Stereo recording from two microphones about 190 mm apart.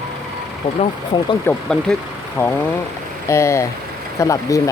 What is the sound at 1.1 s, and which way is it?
Speech, 25° left (ahead or behind).